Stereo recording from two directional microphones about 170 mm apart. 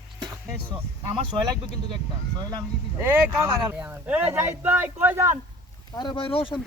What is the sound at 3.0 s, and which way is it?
Speech, 15° right (ahead or behind).